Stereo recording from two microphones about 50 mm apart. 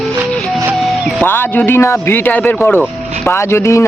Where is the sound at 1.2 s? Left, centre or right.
Left.